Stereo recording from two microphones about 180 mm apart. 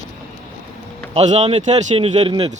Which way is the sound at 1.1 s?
35° right (ahead or behind).